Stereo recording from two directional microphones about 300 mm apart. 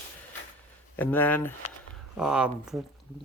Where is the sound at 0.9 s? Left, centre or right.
Centre.